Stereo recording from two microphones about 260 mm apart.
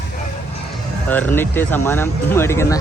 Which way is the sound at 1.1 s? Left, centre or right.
Centre.